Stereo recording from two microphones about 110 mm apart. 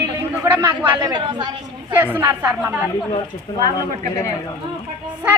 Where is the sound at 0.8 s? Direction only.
40° right (ahead or behind).